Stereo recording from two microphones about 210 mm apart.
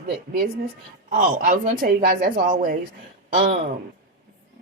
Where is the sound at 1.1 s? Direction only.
40° right (ahead or behind).